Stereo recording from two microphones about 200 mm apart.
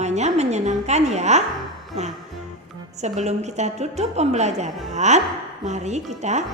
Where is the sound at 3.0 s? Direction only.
35° right (ahead or behind).